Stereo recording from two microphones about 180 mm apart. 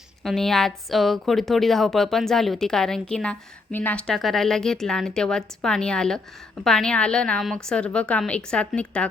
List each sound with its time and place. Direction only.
0.2 s a woman's voice: centre (ahead or behind)